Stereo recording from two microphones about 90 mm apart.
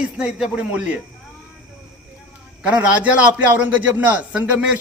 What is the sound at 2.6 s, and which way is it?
A man's voice, 15° right (ahead or behind).